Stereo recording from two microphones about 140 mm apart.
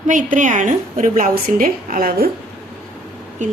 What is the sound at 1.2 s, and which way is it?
A woman's voice, 90° right.